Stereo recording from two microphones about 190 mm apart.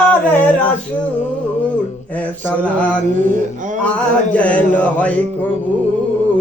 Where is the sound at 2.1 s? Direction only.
10° left (ahead or behind).